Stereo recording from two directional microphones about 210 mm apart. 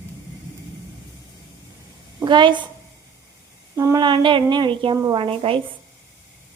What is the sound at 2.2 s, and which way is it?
Speech, 20° right (ahead or behind).